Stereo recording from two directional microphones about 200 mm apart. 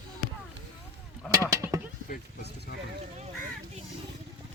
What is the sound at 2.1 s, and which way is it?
Speech, 55° left (ahead or behind).